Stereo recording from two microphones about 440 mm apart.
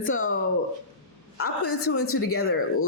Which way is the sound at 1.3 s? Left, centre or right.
Left.